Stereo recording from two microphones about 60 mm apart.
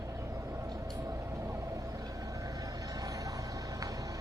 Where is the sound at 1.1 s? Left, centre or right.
Right.